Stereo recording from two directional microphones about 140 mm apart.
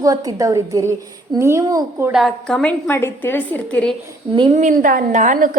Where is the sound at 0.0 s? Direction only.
25° right (ahead or behind).